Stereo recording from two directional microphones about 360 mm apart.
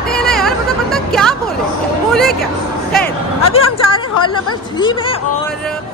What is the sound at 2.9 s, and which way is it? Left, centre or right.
Speech, centre.